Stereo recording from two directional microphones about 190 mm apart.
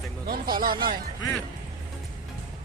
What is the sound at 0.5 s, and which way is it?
Speech, 50° right (ahead or behind).